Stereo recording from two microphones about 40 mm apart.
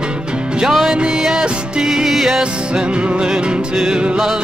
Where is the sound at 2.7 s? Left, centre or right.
Centre.